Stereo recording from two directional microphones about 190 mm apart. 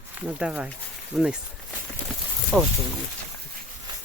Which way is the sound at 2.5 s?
Centre (ahead or behind).